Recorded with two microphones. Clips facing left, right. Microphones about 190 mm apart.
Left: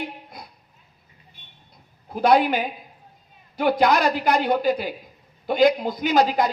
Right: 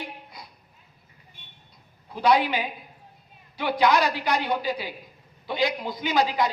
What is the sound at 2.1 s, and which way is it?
A man's voice, 45° left (ahead or behind).